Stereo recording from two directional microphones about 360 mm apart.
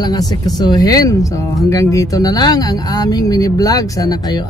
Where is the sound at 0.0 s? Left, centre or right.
Centre.